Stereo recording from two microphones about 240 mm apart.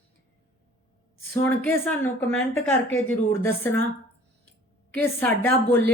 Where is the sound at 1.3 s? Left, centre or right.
Centre.